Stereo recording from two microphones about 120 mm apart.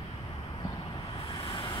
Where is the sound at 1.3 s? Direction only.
50° left (ahead or behind).